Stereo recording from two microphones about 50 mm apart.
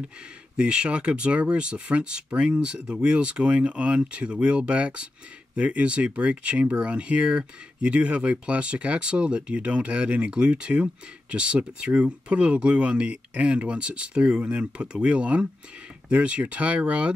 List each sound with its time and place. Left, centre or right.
0.6 s speech: centre